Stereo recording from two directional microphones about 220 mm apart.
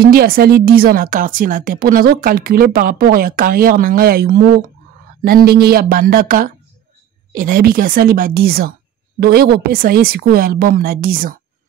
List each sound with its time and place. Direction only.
0.0 s speech: 45° right (ahead or behind)